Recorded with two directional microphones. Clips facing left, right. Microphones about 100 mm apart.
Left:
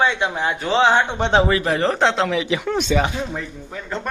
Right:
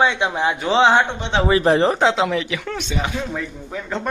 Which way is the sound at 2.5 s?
20° left (ahead or behind).